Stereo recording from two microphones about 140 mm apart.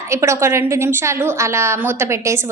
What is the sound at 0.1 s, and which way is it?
A woman's voice, 20° right (ahead or behind).